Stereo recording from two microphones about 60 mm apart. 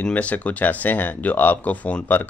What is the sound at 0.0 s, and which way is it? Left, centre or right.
Speech, left.